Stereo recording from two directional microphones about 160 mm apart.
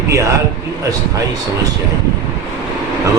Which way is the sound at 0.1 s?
20° right (ahead or behind).